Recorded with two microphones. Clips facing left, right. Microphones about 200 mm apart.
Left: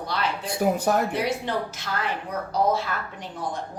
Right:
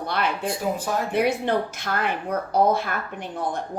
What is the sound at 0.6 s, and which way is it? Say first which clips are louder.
Speech: left 9 dB; 60° left (ahead or behind).